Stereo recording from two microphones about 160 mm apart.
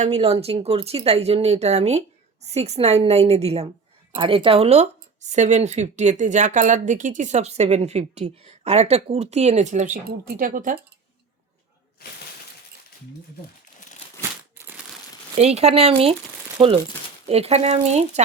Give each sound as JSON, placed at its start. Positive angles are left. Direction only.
{"t": 0.0, "sound": "speech", "side_deg": -40}
{"t": 14.2, "sound": "crumpling", "side_deg": -15}
{"t": 15.4, "sound": "speech", "side_deg": -40}